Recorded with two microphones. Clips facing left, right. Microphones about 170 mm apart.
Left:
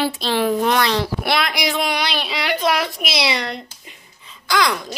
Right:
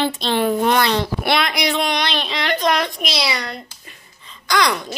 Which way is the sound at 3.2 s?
25° left (ahead or behind).